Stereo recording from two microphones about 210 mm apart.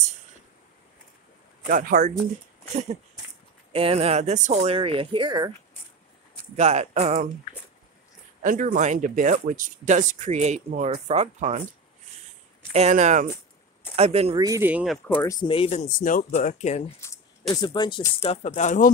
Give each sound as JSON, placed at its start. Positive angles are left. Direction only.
{"t": 1.7, "sound": "speech", "side_deg": -40}
{"t": 6.5, "sound": "speech", "side_deg": -30}
{"t": 8.4, "sound": "speech", "side_deg": -40}
{"t": 12.7, "sound": "speech", "side_deg": -35}
{"t": 14.4, "sound": "speech", "side_deg": -10}
{"t": 15.0, "sound": "speech", "side_deg": 5}
{"t": 15.4, "sound": "speech", "side_deg": 25}
{"t": 17.0, "sound": "speech", "side_deg": 20}